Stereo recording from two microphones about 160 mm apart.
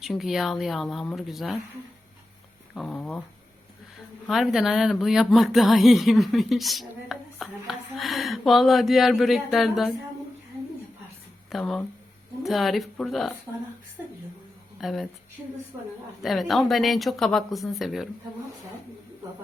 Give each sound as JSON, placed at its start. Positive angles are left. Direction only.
{"t": 0.0, "sound": "speech", "side_deg": 0}
{"t": 2.7, "sound": "speech", "side_deg": 5}
{"t": 4.3, "sound": "speech", "side_deg": 0}
{"t": 11.4, "sound": "speech", "side_deg": 0}
{"t": 14.8, "sound": "a woman's voice", "side_deg": 0}
{"t": 16.2, "sound": "speech", "side_deg": 0}